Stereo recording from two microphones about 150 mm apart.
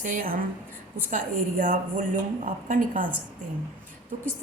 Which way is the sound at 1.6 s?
60° right (ahead or behind).